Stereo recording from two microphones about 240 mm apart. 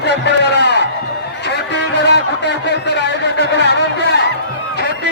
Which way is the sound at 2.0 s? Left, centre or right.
Left.